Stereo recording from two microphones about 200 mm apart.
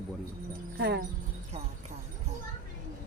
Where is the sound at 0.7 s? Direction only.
55° right (ahead or behind).